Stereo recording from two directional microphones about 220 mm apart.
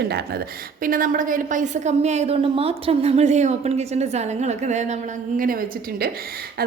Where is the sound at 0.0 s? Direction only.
45° right (ahead or behind).